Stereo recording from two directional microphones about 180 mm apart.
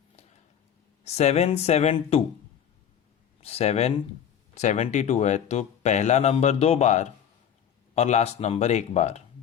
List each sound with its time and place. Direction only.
1.0 s speech: 35° left (ahead or behind)
3.4 s speech: 35° left (ahead or behind)